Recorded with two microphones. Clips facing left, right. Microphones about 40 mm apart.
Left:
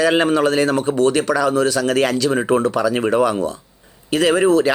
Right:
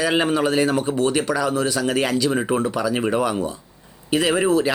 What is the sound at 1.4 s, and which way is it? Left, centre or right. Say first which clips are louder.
Speech: left 5 dB; centre.